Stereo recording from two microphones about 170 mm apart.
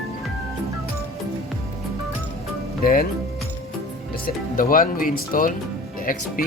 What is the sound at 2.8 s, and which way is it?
Speech, 60° left (ahead or behind).